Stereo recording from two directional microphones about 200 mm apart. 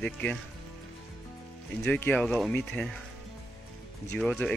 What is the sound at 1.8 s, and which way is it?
Speech, 5° left (ahead or behind).